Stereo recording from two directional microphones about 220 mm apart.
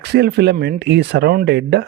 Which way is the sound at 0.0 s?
50° right (ahead or behind).